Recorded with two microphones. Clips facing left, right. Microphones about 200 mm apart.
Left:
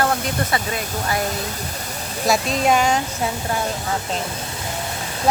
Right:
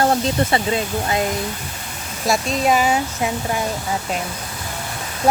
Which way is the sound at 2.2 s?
Centre (ahead or behind).